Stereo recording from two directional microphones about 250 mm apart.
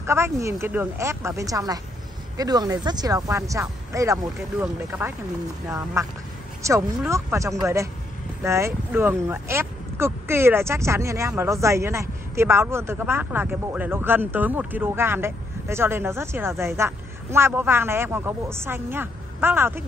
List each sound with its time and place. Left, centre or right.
0.0 s speech: centre